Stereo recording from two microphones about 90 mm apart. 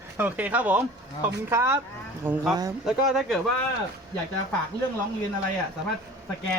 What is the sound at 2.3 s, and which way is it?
Speech, 5° right (ahead or behind).